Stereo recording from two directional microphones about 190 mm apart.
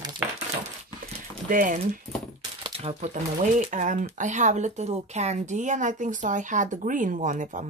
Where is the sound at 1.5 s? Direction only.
45° right (ahead or behind).